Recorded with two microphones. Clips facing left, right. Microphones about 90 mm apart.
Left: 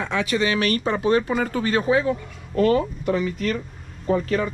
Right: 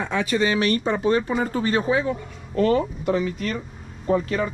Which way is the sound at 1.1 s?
50° left (ahead or behind).